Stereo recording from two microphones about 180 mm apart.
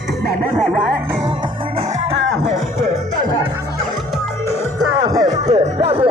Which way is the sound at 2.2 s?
90° right.